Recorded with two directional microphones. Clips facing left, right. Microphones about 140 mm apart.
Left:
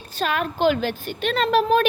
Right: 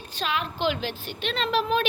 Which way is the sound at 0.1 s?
45° left (ahead or behind).